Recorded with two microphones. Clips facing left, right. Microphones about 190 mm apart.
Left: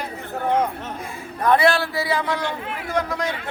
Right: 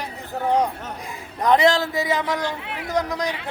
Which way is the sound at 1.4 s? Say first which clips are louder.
Even; 20° right (ahead or behind).